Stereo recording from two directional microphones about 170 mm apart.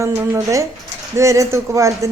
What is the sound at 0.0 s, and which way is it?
A woman's voice, 15° right (ahead or behind).